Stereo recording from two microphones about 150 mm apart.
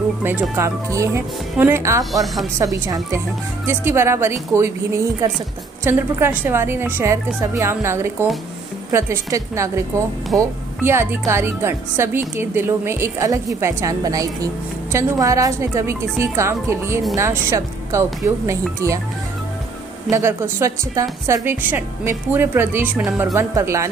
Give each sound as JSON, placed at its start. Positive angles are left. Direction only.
{"t": 0.2, "sound": "a woman's voice", "side_deg": -15}
{"t": 20.1, "sound": "a woman's voice", "side_deg": -20}